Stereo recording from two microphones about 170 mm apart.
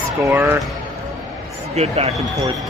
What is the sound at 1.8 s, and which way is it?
Speech, 35° right (ahead or behind).